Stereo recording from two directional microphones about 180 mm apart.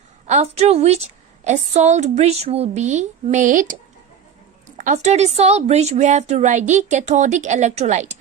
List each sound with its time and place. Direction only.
0.3 s a woman's voice: 40° right (ahead or behind)
4.8 s a woman's voice: 40° right (ahead or behind)